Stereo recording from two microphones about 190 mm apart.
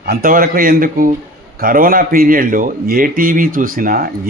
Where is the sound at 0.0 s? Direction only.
50° right (ahead or behind).